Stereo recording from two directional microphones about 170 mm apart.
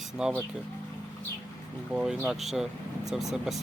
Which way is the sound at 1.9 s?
5° right (ahead or behind).